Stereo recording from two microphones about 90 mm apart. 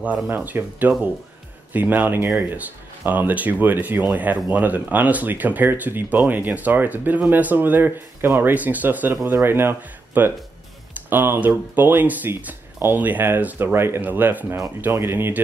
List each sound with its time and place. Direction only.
0.3 s speech: 20° right (ahead or behind)